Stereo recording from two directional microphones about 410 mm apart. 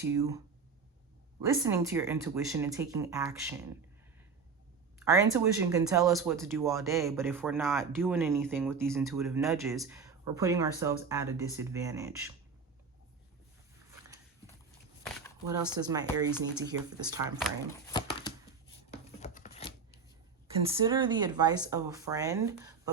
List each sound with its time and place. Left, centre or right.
0.0 s speech: centre
4.9 s speech: centre
15.0 s speech: centre
17.8 s a sound: centre
20.7 s speech: centre